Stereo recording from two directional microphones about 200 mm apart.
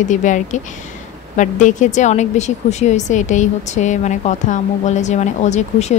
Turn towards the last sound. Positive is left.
turn(degrees=35)  # may be behind; listen again after turning